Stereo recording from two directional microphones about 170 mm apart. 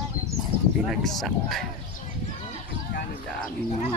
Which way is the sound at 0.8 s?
Centre (ahead or behind).